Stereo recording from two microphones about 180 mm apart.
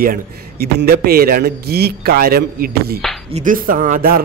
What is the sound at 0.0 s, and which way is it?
A man's voice, 60° right (ahead or behind).